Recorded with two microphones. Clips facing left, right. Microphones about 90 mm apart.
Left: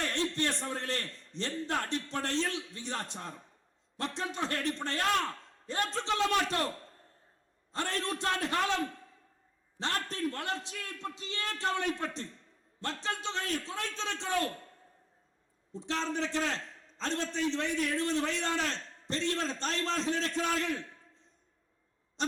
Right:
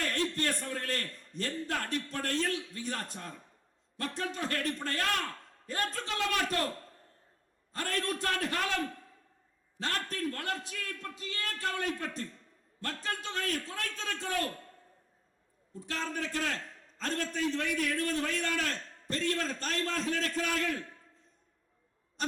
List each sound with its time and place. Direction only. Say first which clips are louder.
0.0 s a man's voice: even; 25° left (ahead or behind)
7.7 s a man's voice: even; 25° left (ahead or behind)
15.7 s a man's voice: left 3 dB; 25° left (ahead or behind)